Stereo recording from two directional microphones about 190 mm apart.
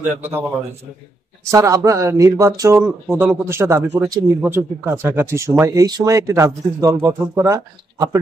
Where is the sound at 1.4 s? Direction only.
15° right (ahead or behind).